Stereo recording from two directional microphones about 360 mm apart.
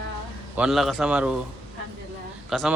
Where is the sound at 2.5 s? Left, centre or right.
Centre.